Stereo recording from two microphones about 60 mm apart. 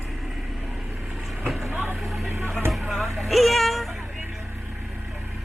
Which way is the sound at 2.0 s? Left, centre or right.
Centre.